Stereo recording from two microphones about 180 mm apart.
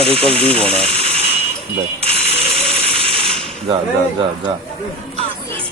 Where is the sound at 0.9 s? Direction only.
35° right (ahead or behind).